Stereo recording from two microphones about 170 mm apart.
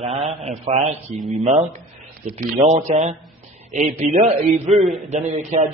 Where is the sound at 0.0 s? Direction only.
35° right (ahead or behind).